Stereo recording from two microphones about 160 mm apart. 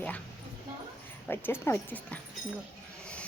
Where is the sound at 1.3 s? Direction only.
15° left (ahead or behind).